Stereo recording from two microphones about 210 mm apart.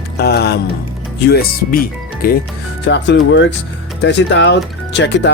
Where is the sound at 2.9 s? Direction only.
55° left (ahead or behind).